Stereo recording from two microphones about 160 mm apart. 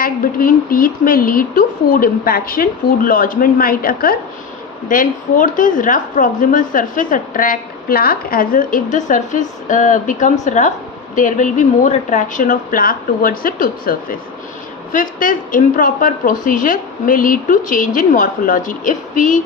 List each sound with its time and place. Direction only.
0.0 s speech: 65° left (ahead or behind)